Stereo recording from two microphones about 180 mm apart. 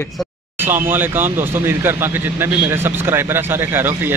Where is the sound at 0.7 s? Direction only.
10° right (ahead or behind).